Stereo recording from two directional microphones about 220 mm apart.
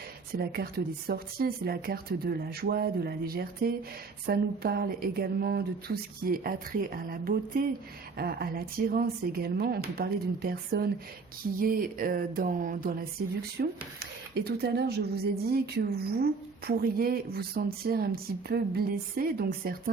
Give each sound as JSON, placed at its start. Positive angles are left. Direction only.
{"t": 0.3, "sound": "a woman's voice", "side_deg": -45}
{"t": 11.6, "sound": "a sound", "side_deg": -40}
{"t": 13.6, "sound": "a woman's voice", "side_deg": -45}